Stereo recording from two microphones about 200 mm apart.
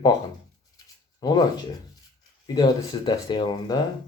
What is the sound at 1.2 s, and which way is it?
Speech, 20° left (ahead or behind).